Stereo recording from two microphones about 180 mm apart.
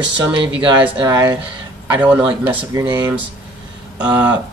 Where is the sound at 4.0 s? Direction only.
10° right (ahead or behind).